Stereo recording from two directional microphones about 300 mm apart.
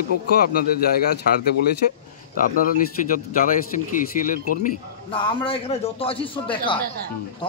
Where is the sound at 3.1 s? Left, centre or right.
Left.